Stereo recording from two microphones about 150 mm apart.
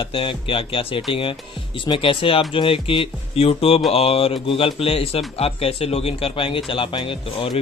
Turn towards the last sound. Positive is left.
turn(degrees=35)  # may be behind; listen again after turning